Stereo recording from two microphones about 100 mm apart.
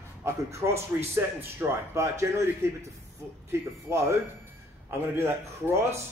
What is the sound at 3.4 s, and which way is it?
Speech, 25° right (ahead or behind).